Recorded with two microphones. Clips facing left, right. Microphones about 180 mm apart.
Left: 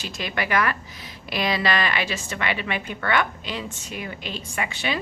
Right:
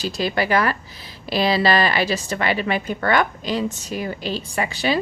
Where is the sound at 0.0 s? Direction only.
35° right (ahead or behind).